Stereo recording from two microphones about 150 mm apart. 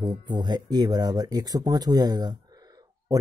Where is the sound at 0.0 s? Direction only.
30° right (ahead or behind).